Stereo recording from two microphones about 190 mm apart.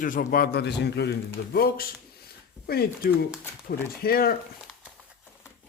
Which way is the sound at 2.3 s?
55° left (ahead or behind).